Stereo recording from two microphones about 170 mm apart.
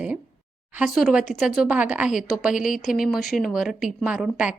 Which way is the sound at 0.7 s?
5° right (ahead or behind).